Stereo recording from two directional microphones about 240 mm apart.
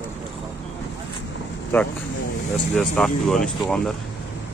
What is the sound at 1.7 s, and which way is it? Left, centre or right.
Speech, centre.